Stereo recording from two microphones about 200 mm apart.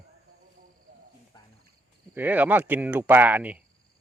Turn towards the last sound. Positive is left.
turn(degrees=-10)  # may be behind; listen again after turning